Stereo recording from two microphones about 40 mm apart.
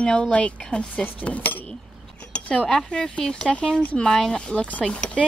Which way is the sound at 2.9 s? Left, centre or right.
Left.